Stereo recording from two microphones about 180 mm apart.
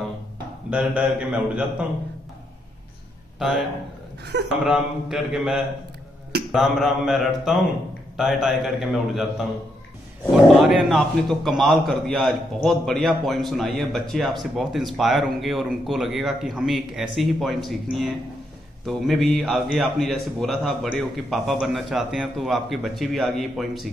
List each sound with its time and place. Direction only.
0.7 s a man's voice: 5° right (ahead or behind)
3.3 s a man's voice: centre (ahead or behind)
10.3 s a man's voice: centre (ahead or behind)
18.9 s a man's voice: centre (ahead or behind)